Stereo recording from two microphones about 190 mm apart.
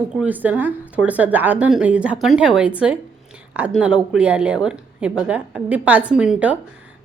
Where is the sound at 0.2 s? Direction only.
10° right (ahead or behind).